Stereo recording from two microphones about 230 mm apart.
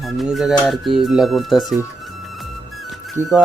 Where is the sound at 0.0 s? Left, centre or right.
Centre.